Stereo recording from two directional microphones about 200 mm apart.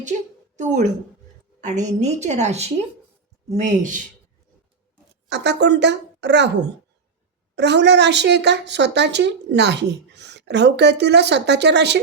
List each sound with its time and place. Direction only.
0.5 s a woman's voice: 40° right (ahead or behind)
5.3 s a woman's voice: 60° right (ahead or behind)
7.5 s a woman's voice: 60° right (ahead or behind)